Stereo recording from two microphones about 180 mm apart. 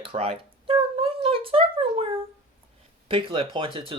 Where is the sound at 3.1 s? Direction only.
30° right (ahead or behind).